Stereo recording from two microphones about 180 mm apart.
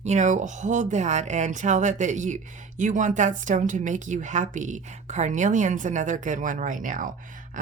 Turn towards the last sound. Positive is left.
turn(degrees=-45)  # may be behind; listen again after turning